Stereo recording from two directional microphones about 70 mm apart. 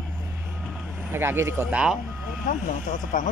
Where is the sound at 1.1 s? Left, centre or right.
Right.